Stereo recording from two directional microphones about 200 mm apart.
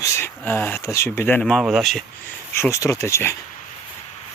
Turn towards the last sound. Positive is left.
turn(degrees=15)  # may be behind; listen again after turning